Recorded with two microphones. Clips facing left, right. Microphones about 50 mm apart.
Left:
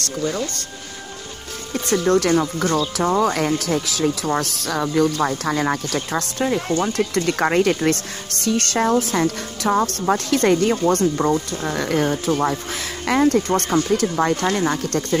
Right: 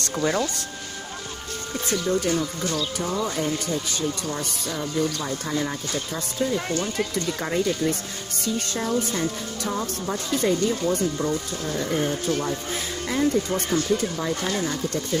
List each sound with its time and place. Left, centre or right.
0.0 s speech: right
1.9 s speech: left
3.0 s speech: left
5.6 s speech: left
6.8 s speech: left
13.3 s speech: left